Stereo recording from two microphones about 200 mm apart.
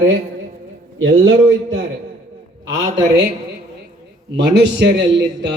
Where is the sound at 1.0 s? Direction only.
60° right (ahead or behind).